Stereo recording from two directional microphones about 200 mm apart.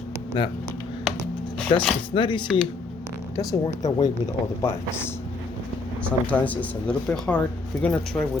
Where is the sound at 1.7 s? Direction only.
25° left (ahead or behind).